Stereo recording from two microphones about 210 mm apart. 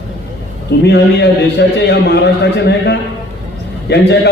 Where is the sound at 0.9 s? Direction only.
55° left (ahead or behind).